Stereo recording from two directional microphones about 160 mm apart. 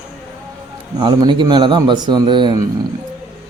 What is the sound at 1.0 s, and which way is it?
Speech, 30° right (ahead or behind).